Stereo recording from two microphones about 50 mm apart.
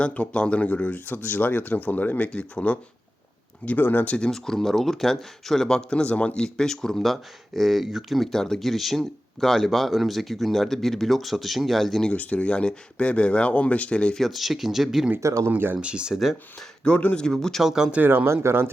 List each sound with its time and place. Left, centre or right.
0.0 s speech: left
1.0 s speech: left
3.8 s speech: left
4.3 s speech: centre
7.0 s speech: centre
12.1 s speech: left
14.2 s speech: centre
15.2 s speech: right
15.4 s speech: right
15.8 s speech: right
16.6 s speech: left
17.6 s speech: centre
18.3 s speech: right